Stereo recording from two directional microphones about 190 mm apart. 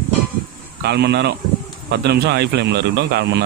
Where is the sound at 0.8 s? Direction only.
60° right (ahead or behind).